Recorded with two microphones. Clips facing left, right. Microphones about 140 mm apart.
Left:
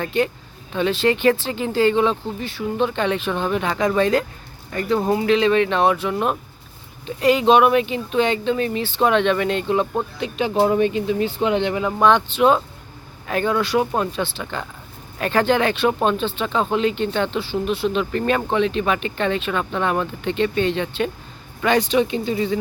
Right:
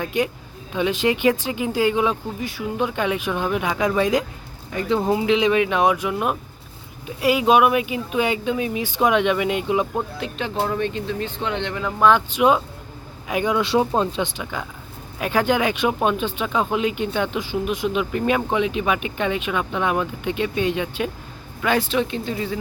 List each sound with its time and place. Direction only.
0.0 s speech: 10° right (ahead or behind)
9.9 s speech: centre (ahead or behind)
12.0 s speech: 10° right (ahead or behind)
13.7 s speech: 25° right (ahead or behind); by 22.5 s centre (ahead or behind)